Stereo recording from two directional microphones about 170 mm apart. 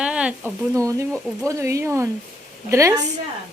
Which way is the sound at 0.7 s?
20° right (ahead or behind).